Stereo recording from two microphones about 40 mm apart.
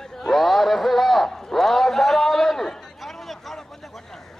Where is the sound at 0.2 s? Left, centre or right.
Centre.